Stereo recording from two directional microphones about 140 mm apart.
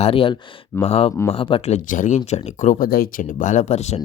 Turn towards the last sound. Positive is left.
turn(degrees=55)  # may be behind; listen again after turning